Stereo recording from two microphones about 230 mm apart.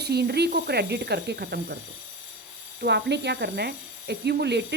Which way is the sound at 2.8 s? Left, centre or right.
Right.